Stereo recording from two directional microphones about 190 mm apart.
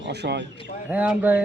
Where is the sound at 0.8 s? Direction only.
10° right (ahead or behind).